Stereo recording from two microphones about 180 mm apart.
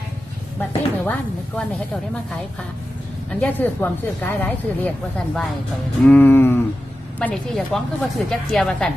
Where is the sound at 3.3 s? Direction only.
10° left (ahead or behind).